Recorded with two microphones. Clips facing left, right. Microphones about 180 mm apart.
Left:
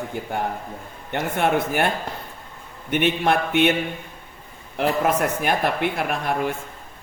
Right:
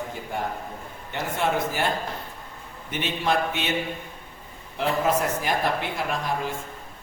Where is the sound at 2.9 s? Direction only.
60° left (ahead or behind).